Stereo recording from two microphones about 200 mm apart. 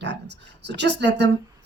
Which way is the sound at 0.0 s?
60° right (ahead or behind).